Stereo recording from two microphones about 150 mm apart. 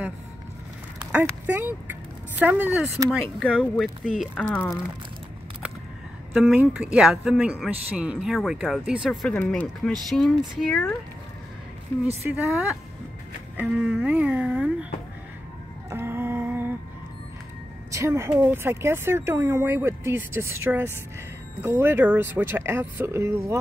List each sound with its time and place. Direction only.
1.2 s speech: 15° right (ahead or behind)
6.3 s speech: 5° right (ahead or behind)
12.4 s speech: 5° right (ahead or behind)
15.9 s humming: 15° right (ahead or behind)
17.9 s speech: 15° right (ahead or behind)